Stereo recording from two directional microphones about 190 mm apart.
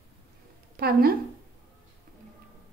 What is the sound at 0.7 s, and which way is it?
Speech, 55° right (ahead or behind).